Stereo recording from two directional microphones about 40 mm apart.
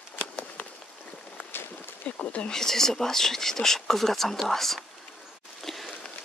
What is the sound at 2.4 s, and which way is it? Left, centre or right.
Speech, centre.